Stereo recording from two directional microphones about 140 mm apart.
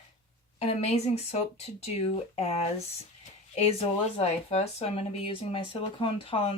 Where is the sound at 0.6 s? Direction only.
50° left (ahead or behind).